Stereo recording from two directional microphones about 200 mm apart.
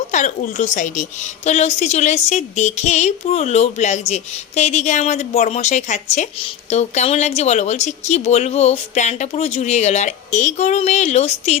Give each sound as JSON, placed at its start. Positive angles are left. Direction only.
{"t": 0.1, "sound": "a woman's voice", "side_deg": 40}